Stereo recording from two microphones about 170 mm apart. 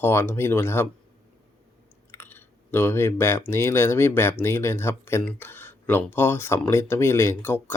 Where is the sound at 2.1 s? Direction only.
15° left (ahead or behind).